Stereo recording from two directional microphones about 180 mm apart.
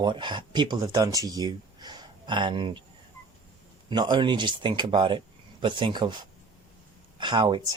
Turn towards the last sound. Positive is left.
turn(degrees=-25)  # may be behind; listen again after turning